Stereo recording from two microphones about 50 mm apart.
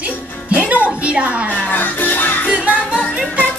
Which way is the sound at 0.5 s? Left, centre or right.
Right.